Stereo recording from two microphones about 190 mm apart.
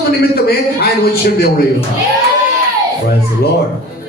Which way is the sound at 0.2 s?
55° left (ahead or behind).